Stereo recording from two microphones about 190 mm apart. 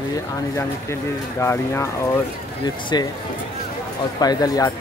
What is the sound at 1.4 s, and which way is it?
Speech, 15° left (ahead or behind).